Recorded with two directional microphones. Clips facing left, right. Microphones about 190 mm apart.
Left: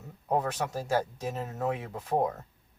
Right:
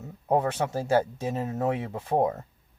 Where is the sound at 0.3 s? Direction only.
25° right (ahead or behind).